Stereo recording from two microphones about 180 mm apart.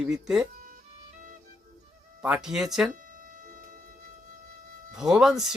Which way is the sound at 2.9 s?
45° right (ahead or behind).